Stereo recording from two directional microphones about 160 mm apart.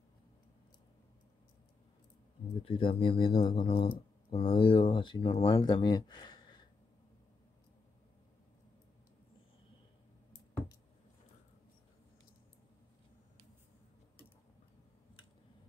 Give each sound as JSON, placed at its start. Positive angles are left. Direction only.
{"t": 2.6, "sound": "speech", "side_deg": 35}